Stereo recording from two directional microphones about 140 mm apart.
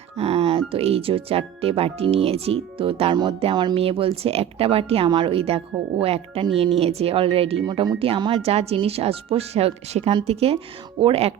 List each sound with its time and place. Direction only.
0.2 s speech: 45° right (ahead or behind)